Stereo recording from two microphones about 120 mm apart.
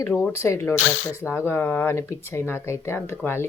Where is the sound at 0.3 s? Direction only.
25° left (ahead or behind).